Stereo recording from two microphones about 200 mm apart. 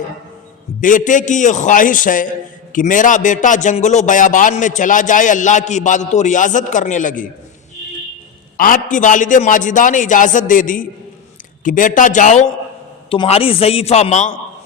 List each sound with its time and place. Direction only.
0.8 s a man's voice: 40° left (ahead or behind)
8.5 s a man's voice: 45° left (ahead or behind)